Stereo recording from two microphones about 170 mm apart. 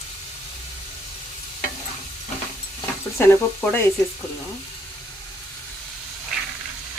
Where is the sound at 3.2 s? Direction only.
10° left (ahead or behind).